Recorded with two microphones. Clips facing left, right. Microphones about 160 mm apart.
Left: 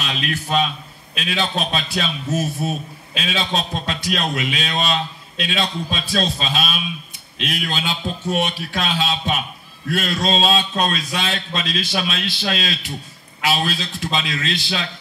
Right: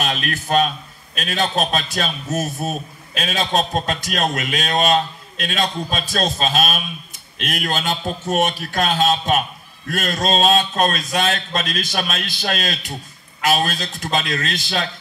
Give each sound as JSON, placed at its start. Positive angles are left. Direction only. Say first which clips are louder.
{"t": 0.0, "sound": "a man's voice", "louder": "right 2 dB", "side_deg": -50}